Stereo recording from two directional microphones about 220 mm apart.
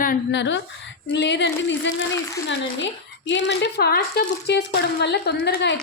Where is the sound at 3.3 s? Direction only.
50° left (ahead or behind).